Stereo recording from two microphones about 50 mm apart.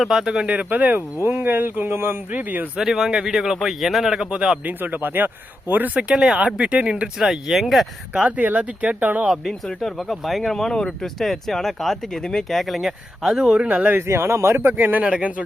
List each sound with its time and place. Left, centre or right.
0.0 s speech: centre
0.4 s speech: right
1.3 s speech: right
2.3 s speech: right
2.7 s speech: centre
4.6 s speech: right
5.9 s speech: right; by 7.9 s centre
8.4 s speech: right
9.8 s speech: centre
13.6 s speech: right
14.1 s speech: right
14.8 s speech: right
15.0 s speech: right